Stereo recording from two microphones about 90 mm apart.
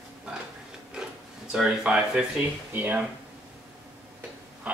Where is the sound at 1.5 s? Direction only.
10° right (ahead or behind).